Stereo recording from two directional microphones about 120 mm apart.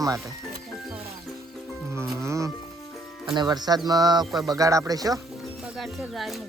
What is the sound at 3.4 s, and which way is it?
Speech, 35° right (ahead or behind).